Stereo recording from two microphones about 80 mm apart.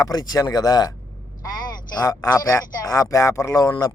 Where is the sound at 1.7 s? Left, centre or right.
Left.